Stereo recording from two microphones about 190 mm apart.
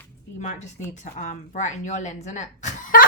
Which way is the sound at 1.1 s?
40° left (ahead or behind).